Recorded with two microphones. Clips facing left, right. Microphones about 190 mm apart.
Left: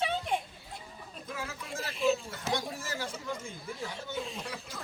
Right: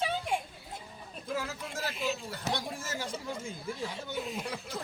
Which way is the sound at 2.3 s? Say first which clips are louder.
Left 1 dB; 35° right (ahead or behind).